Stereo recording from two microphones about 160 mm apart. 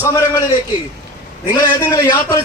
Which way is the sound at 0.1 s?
20° left (ahead or behind).